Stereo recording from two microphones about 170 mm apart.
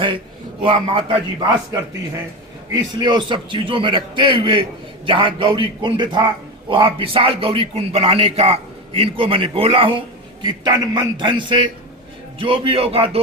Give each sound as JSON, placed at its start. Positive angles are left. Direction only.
{"t": 0.6, "sound": "a man's voice", "side_deg": -30}
{"t": 2.9, "sound": "a man's voice", "side_deg": -25}